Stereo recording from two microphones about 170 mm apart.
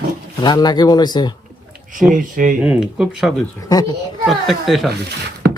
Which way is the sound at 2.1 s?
50° right (ahead or behind).